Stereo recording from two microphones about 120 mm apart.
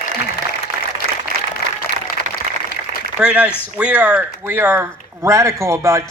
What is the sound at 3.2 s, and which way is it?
A man's voice, 10° right (ahead or behind).